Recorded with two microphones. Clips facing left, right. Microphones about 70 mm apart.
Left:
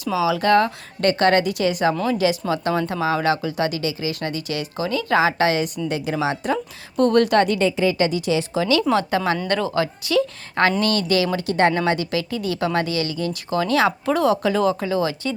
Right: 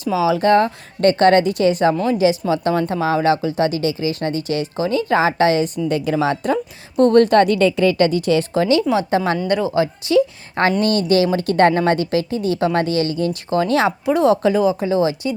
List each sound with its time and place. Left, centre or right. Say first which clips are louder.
0.0 s speech: right 3 dB; right
2.0 s a woman's voice: right 4 dB; right
5.9 s a woman's voice: right 5 dB; right
9.0 s speech: right 3 dB; right
9.5 s speech: right 6 dB; centre
9.8 s a woman's voice: right 5 dB; right
11.3 s a woman's voice: right 4 dB; right
14.0 s a woman's voice: right 4 dB; centre
14.8 s a woman's voice: right 4 dB; right